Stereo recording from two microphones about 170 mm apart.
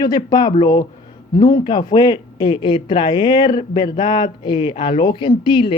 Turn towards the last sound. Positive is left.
turn(degrees=30)  # may be behind; listen again after turning